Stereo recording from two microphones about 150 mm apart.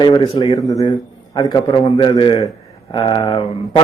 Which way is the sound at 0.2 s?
40° left (ahead or behind).